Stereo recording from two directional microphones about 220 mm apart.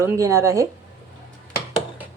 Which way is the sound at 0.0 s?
15° right (ahead or behind).